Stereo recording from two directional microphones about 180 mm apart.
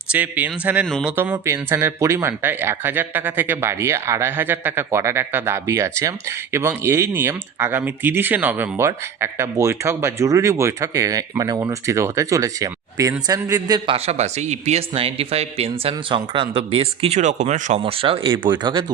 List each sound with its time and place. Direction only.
0.1 s speech: 10° right (ahead or behind)
13.9 s speech: 35° right (ahead or behind)